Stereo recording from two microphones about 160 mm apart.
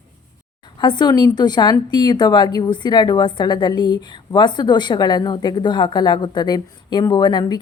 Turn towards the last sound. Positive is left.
turn(degrees=25)  # may be behind; listen again after turning